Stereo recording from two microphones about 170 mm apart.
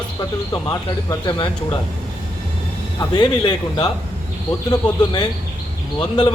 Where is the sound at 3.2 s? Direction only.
25° left (ahead or behind).